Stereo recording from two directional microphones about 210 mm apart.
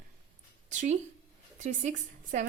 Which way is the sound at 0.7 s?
35° right (ahead or behind).